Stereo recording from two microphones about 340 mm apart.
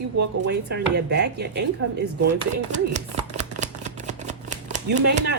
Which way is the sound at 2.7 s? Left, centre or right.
Right.